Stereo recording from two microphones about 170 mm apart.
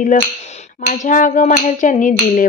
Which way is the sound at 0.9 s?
50° left (ahead or behind).